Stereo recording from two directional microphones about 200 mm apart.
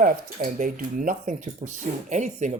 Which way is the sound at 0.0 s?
40° right (ahead or behind).